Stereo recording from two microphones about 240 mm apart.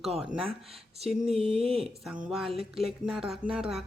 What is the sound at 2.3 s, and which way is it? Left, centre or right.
Speech, centre.